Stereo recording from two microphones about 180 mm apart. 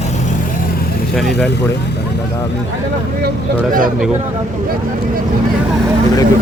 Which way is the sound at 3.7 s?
50° right (ahead or behind).